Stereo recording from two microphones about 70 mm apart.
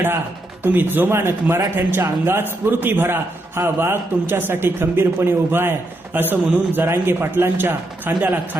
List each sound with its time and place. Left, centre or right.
0.6 s a man's voice: right